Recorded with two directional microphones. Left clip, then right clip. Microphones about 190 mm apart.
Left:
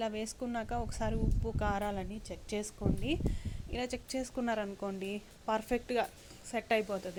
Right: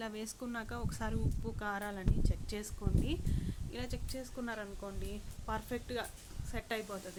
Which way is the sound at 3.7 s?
30° left (ahead or behind).